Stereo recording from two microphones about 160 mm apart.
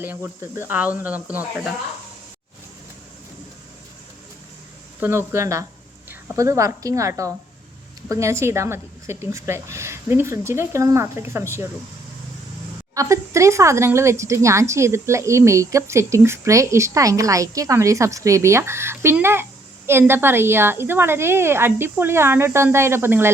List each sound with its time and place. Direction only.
0.0 s speech: 15° right (ahead or behind)
4.9 s a woman's voice: 15° right (ahead or behind)
12.9 s speech: 20° right (ahead or behind)